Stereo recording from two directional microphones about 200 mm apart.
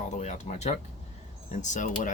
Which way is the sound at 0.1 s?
35° left (ahead or behind).